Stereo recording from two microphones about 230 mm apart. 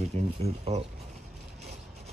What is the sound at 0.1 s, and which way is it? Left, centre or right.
Speech, right.